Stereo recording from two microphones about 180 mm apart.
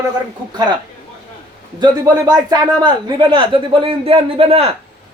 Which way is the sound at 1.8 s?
20° right (ahead or behind).